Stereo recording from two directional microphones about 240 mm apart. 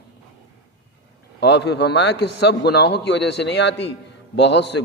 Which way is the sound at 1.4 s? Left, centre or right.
Left.